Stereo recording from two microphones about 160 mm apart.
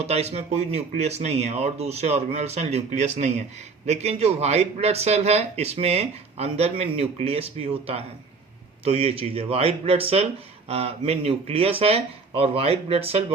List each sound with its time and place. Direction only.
0.0 s speech: 40° right (ahead or behind)